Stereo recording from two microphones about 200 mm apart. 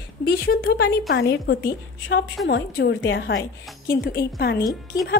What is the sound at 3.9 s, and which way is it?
Speech, 50° left (ahead or behind).